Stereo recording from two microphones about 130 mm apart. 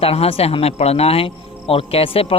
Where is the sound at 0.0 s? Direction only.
50° left (ahead or behind).